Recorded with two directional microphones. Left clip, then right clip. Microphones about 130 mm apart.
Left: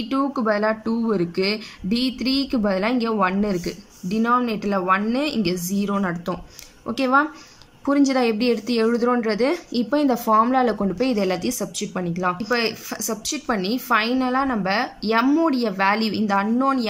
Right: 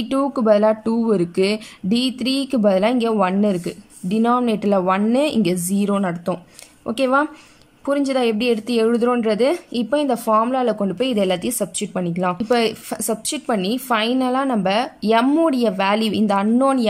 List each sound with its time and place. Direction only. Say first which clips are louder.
0.1 s a woman's voice: right 5 dB; 25° right (ahead or behind)